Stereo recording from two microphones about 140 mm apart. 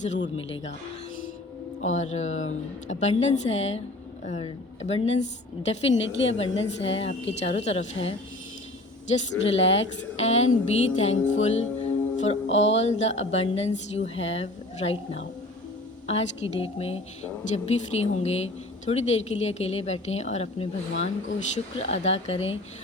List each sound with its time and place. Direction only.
0.0 s speech: 55° left (ahead or behind)
1.8 s a woman's voice: 55° left (ahead or behind)